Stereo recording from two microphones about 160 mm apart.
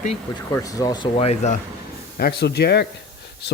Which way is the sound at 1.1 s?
40° left (ahead or behind).